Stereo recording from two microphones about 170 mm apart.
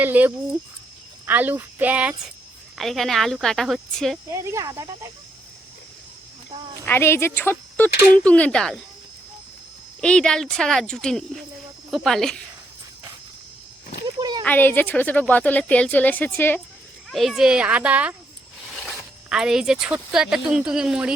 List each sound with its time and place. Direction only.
0.0 s child singing: 10° right (ahead or behind)
2.7 s speech: centre (ahead or behind)
4.3 s child singing: 15° right (ahead or behind)
6.8 s a woman's voice: 15° left (ahead or behind)
10.0 s speech: 5° left (ahead or behind)
14.2 s a sound: 25° right (ahead or behind)
14.4 s a woman's voice: 10° left (ahead or behind)
17.1 s speech: centre (ahead or behind)
18.6 s zipper: 5° left (ahead or behind)
19.3 s speech: 5° right (ahead or behind)